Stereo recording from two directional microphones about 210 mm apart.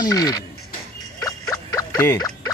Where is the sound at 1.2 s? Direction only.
15° left (ahead or behind).